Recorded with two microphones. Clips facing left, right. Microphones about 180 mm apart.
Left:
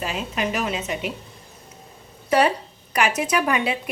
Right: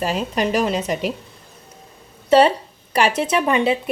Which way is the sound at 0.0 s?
40° right (ahead or behind).